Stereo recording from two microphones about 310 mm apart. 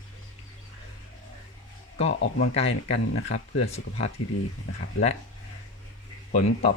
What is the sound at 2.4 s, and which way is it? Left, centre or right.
Speech, centre.